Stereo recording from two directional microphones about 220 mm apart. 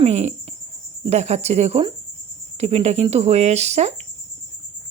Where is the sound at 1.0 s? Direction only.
30° right (ahead or behind).